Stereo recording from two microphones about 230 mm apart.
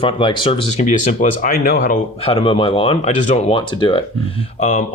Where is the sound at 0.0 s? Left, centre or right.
Left.